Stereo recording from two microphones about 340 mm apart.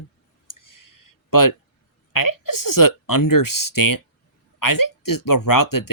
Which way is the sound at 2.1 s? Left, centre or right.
Left.